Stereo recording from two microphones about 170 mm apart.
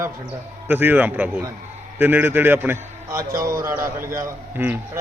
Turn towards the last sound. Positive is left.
turn(degrees=-15)  # may be behind; listen again after turning